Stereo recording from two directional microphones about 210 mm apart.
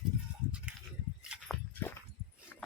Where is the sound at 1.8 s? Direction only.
10° left (ahead or behind).